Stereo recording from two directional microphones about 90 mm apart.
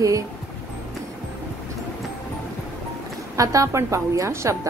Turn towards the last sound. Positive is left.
turn(degrees=-35)  # may be behind; listen again after turning